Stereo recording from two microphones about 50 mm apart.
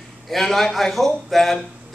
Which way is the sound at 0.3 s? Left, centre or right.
Centre.